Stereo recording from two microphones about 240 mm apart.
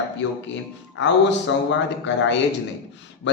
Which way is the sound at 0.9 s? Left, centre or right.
Left.